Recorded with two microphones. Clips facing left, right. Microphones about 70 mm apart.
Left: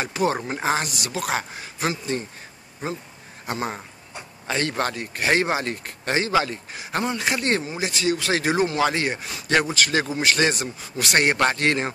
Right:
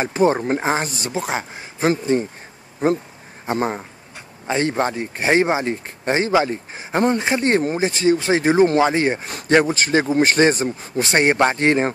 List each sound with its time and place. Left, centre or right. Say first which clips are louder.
0.0 s speech: right 6 dB; right
3.4 s a man's voice: right 6 dB; right